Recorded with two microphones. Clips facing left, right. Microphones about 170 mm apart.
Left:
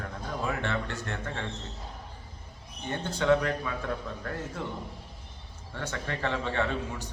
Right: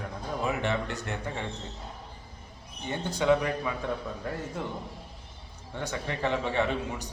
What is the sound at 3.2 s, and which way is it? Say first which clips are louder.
A man's voice: even; 15° right (ahead or behind).